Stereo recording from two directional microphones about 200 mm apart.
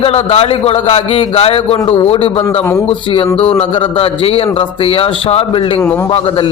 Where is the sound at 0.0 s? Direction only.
30° left (ahead or behind).